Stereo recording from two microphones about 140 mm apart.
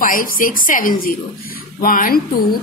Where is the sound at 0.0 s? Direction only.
85° left.